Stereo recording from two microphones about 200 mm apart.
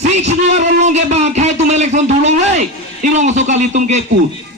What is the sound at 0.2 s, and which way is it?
A man's voice, 35° right (ahead or behind).